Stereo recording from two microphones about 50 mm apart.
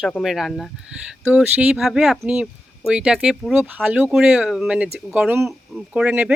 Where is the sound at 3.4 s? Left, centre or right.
Centre.